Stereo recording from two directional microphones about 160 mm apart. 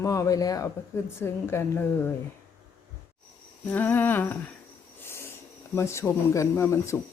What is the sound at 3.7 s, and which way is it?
Speech, 10° left (ahead or behind).